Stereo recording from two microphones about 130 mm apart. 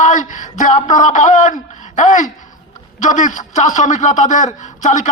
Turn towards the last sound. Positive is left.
turn(degrees=65)  # may be behind; listen again after turning